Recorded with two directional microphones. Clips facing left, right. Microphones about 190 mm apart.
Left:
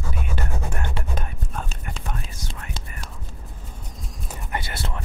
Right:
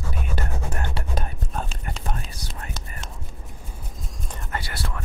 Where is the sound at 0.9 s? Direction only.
35° right (ahead or behind).